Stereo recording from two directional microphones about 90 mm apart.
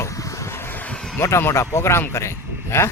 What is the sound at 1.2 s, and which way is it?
Speech, 30° left (ahead or behind).